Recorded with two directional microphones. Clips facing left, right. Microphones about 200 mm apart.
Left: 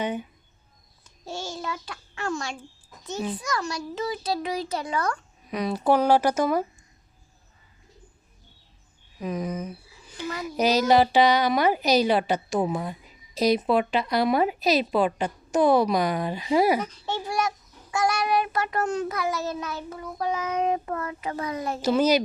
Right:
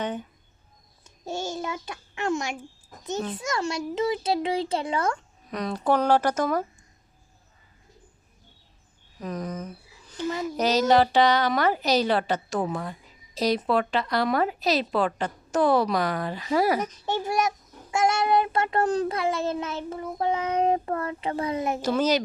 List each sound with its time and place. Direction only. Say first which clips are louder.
0.0 s a sound: left 2 dB; 10° left (ahead or behind)
1.3 s child singing: right 3 dB; 20° right (ahead or behind)
2.9 s a sound: right 3 dB; 50° right (ahead or behind)
3.3 s child singing: right 2 dB; 25° right (ahead or behind)
5.5 s a woman's voice: left 2 dB; 10° left (ahead or behind)
9.1 s a woman's voice: left 3 dB; 5° left (ahead or behind)
16.8 s a child's voice: right 3 dB; 15° right (ahead or behind)
17.9 s child singing: right 2 dB; 25° right (ahead or behind)
21.8 s a woman's voice: left 4 dB; 10° left (ahead or behind)